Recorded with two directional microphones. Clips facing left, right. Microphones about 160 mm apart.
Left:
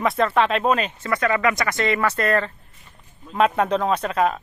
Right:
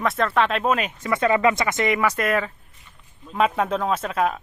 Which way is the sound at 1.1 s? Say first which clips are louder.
Right 2 dB; 25° right (ahead or behind).